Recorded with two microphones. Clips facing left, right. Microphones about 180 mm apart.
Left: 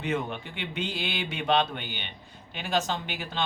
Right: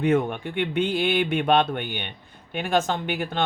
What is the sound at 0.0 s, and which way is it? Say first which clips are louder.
Speech: right 8 dB; 55° right (ahead or behind).